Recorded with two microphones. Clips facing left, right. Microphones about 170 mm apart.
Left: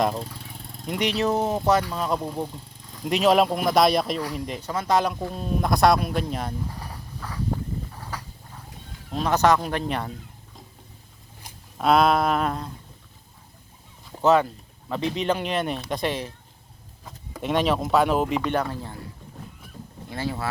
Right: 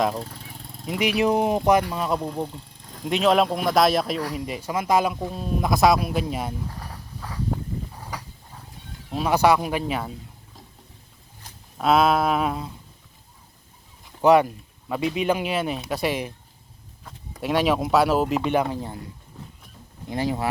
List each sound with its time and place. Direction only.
0.9 s speech: 5° right (ahead or behind)
1.9 s speech: 5° right (ahead or behind)
9.1 s speech: 10° right (ahead or behind)
11.8 s speech: centre (ahead or behind)
14.2 s speech: 15° right (ahead or behind)
17.4 s speech: 5° right (ahead or behind)
20.1 s speech: 15° right (ahead or behind)